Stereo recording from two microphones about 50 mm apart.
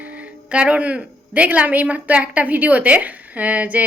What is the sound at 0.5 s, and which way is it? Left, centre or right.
A man's voice, right.